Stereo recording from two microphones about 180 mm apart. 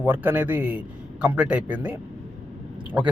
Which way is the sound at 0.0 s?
10° right (ahead or behind).